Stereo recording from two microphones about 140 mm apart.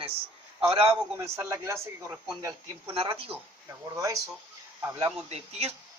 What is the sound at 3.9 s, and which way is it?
Speech, 25° right (ahead or behind).